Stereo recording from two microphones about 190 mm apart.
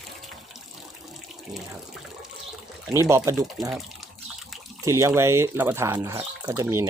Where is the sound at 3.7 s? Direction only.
Centre (ahead or behind).